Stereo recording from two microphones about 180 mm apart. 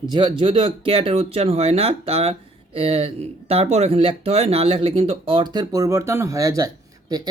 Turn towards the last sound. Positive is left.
turn(degrees=-20)  # may be behind; listen again after turning